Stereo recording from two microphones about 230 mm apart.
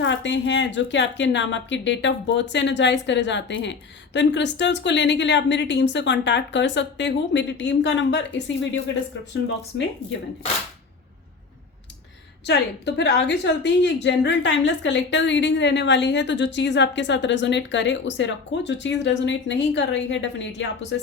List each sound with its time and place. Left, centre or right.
0.0 s speech: left
12.5 s speech: left